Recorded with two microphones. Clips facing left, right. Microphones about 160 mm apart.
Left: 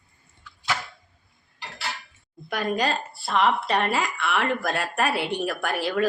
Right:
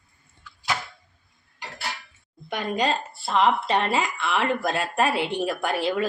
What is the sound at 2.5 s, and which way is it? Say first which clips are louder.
Speech: even; 20° right (ahead or behind).